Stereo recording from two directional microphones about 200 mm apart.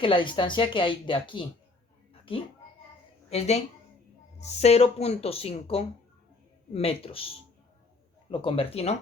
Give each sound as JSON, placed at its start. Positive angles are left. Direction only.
{"t": 0.0, "sound": "speech", "side_deg": 25}
{"t": 3.2, "sound": "a woman's voice", "side_deg": 30}
{"t": 8.3, "sound": "speech", "side_deg": 25}